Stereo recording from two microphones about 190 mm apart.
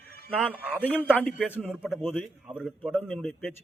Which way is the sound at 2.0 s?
10° left (ahead or behind).